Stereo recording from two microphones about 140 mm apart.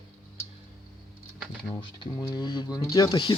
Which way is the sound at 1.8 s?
30° left (ahead or behind).